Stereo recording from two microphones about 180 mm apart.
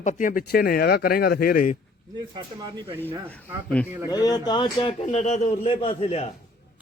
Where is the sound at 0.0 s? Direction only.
45° left (ahead or behind).